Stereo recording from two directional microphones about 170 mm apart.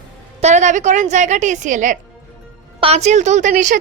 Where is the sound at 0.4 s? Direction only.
45° right (ahead or behind).